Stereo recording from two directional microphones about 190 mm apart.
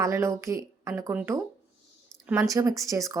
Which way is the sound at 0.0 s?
15° right (ahead or behind).